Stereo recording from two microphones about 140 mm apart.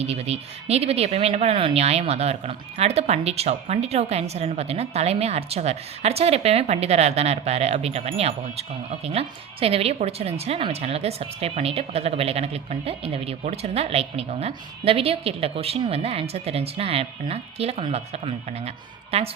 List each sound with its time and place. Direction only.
0.0 s speech: 50° right (ahead or behind)